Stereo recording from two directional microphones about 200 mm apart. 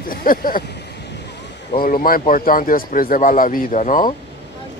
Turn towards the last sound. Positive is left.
turn(degrees=40)  # may be behind; listen again after turning